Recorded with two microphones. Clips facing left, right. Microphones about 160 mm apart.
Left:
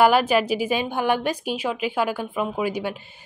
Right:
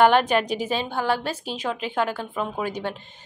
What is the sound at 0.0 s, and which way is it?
A woman's voice, 5° left (ahead or behind).